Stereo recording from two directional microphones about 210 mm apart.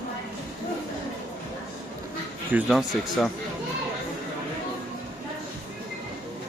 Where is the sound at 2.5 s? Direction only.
Centre (ahead or behind).